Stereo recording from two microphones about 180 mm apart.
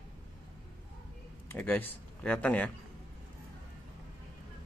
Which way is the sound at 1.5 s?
10° left (ahead or behind).